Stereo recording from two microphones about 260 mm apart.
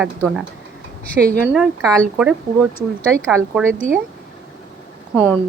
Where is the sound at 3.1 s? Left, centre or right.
Centre.